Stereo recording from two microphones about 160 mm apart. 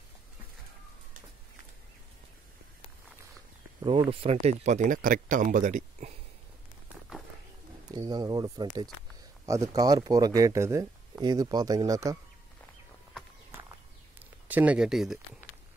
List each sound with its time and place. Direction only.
4.1 s speech: 40° right (ahead or behind)
7.9 s speech: 25° right (ahead or behind)
14.5 s speech: 10° right (ahead or behind)